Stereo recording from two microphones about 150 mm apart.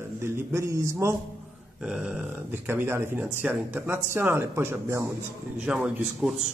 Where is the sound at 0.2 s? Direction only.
20° right (ahead or behind).